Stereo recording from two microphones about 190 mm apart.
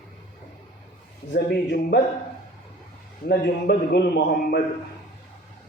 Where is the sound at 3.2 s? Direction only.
55° left (ahead or behind).